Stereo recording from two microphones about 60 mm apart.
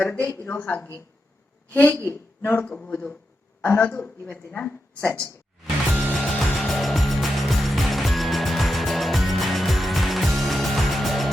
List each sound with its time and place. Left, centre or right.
0.1 s a woman's voice: left
2.7 s a woman's voice: left
5.6 s music: centre